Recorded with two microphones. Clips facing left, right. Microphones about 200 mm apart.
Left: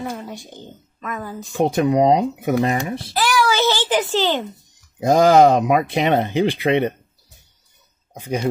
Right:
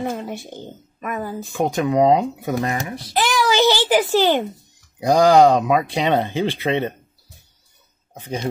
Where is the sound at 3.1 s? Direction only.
20° right (ahead or behind).